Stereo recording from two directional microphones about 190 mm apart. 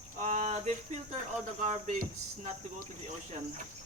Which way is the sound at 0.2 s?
40° right (ahead or behind).